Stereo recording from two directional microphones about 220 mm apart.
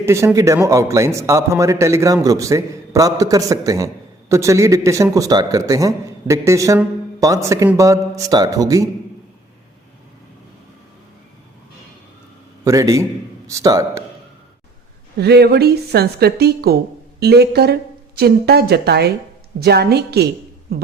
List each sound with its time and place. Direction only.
0.0 s a man's voice: 10° right (ahead or behind)
12.6 s a man's voice: 15° right (ahead or behind)
15.2 s a woman's voice: 50° right (ahead or behind)